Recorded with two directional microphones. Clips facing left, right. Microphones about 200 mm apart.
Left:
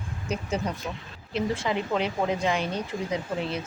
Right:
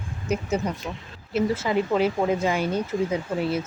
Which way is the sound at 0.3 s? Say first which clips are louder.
Right 4 dB; 10° right (ahead or behind).